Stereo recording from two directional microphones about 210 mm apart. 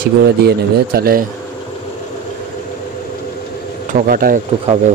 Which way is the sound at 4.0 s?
45° right (ahead or behind).